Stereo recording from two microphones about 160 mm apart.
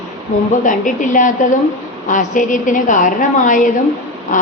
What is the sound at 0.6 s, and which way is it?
A woman's voice, 55° left (ahead or behind).